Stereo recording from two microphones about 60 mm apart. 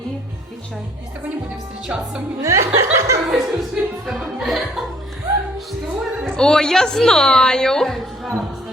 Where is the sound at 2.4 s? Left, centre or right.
Right.